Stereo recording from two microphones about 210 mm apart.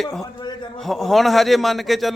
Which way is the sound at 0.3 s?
25° left (ahead or behind).